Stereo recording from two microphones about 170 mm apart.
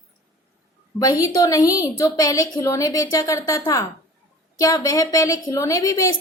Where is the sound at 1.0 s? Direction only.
20° left (ahead or behind).